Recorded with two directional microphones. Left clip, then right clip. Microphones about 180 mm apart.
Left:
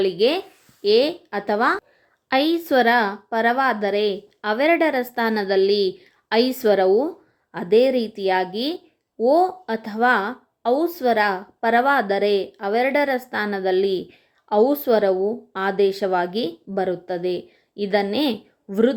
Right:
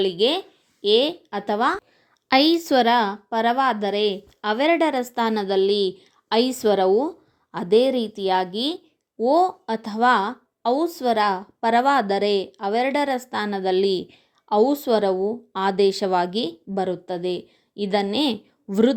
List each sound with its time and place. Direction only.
0.0 s a woman's voice: 20° right (ahead or behind)
2.3 s a woman's voice: 30° right (ahead or behind)